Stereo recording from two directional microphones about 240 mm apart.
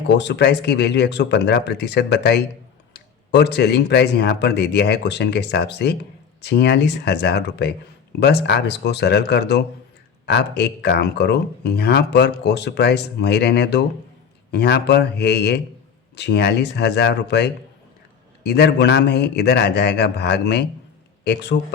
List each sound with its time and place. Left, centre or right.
0.1 s speech: left